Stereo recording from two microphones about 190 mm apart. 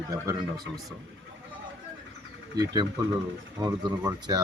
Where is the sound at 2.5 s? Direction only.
20° right (ahead or behind).